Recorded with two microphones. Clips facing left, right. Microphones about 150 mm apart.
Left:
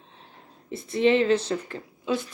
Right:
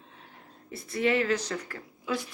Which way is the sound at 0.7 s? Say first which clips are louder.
Left 6 dB; 25° left (ahead or behind).